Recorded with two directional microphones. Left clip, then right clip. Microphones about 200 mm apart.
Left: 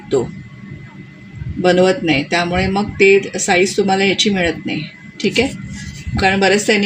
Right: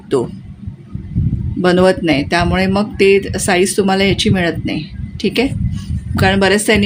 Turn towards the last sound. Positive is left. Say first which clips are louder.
# right 1 dB
turn(degrees=-30)  # may be behind; listen again after turning